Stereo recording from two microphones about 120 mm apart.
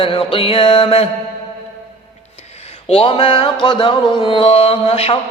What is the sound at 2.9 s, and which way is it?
Music, 50° left (ahead or behind).